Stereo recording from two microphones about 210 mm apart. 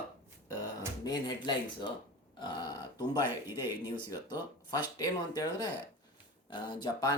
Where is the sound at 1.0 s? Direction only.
20° left (ahead or behind).